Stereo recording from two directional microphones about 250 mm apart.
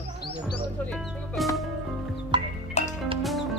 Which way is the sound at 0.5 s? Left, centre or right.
Centre.